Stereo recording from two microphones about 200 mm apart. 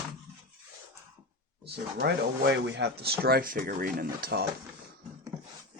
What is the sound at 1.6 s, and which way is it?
Speech, 55° right (ahead or behind).